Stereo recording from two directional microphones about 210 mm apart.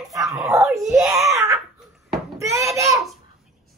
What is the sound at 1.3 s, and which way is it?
Baby laughter, 15° right (ahead or behind).